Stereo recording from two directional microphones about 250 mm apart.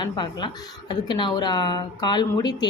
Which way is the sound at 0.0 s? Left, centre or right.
Centre.